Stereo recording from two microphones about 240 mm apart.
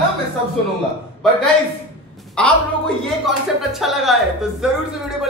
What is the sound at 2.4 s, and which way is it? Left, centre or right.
A man's voice, centre.